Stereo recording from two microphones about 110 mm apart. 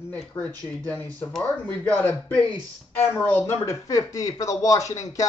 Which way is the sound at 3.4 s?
30° left (ahead or behind).